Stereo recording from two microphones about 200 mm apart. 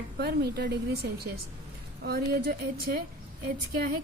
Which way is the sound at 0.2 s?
55° right (ahead or behind).